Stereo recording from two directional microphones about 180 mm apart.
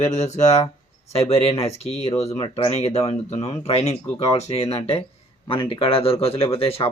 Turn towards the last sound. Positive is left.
turn(degrees=35)  # may be behind; listen again after turning